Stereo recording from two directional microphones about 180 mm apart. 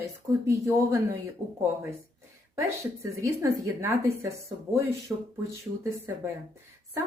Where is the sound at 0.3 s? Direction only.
15° right (ahead or behind).